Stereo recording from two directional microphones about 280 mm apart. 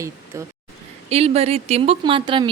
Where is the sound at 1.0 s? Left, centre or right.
Right.